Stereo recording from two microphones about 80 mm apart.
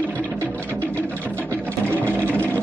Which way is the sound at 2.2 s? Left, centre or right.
Centre.